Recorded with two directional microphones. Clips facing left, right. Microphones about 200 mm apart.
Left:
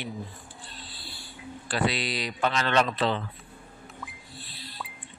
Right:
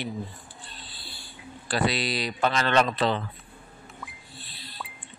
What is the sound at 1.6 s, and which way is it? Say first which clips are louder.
Speech: right 2 dB; 35° right (ahead or behind).